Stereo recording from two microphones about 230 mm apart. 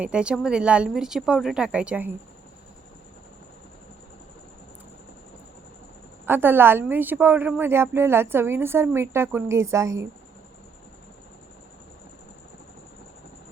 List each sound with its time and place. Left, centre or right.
0.0 s a woman's voice: centre
6.2 s a woman's voice: centre